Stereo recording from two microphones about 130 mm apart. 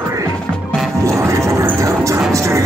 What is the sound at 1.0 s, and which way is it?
Music, 25° right (ahead or behind).